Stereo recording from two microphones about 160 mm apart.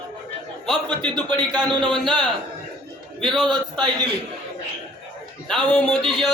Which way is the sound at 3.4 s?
30° right (ahead or behind).